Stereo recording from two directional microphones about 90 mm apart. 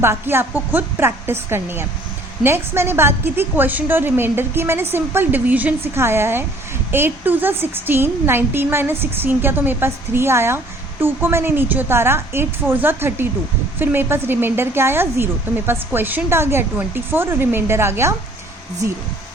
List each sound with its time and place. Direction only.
0.0 s a woman's voice: 25° right (ahead or behind)